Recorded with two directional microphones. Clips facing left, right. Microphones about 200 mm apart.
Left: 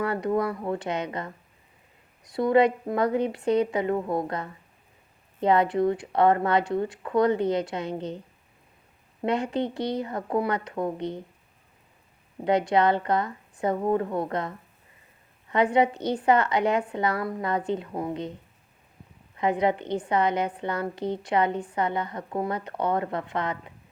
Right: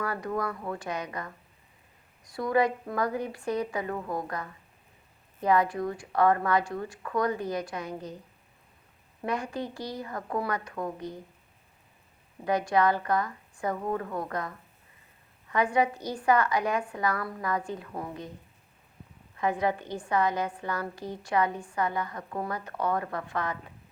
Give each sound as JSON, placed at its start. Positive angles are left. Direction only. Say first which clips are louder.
{"t": 0.0, "sound": "a woman's voice", "louder": "left 6 dB", "side_deg": 25}
{"t": 2.3, "sound": "a woman's voice", "louder": "left 5 dB", "side_deg": 25}
{"t": 9.2, "sound": "a woman's voice", "louder": "left 6 dB", "side_deg": 25}
{"t": 12.5, "sound": "a woman's voice", "louder": "left 3 dB", "side_deg": 25}
{"t": 19.4, "sound": "a woman's voice", "louder": "left 4 dB", "side_deg": 20}